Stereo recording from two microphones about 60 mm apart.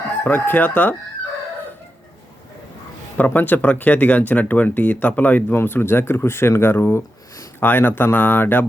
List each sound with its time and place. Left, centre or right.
0.3 s speech: left
3.2 s speech: left
5.5 s speech: left
7.6 s speech: left